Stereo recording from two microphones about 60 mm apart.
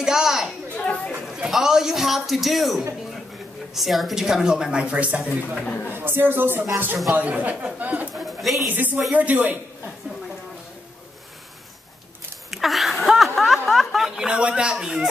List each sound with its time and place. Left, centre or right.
0.0 s a sound: centre
0.7 s chatter: left
1.2 s a man's voice: centre; by 5.6 s right
5.9 s speech: right
8.1 s bird: centre
8.6 s speech: right
12.4 s a sound: centre